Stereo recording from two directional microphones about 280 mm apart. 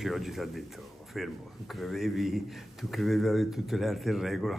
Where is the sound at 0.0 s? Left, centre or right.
Centre.